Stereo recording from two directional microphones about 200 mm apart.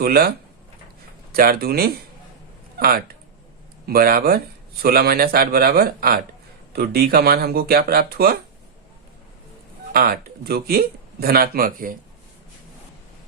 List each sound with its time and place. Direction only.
0.0 s a man's voice: 50° right (ahead or behind)
9.9 s a man's voice: 50° right (ahead or behind)